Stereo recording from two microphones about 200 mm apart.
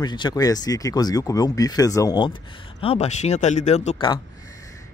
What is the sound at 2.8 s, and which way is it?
Speech, 30° left (ahead or behind).